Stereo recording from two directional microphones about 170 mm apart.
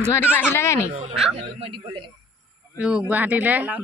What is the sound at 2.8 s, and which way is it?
Speech, 5° right (ahead or behind).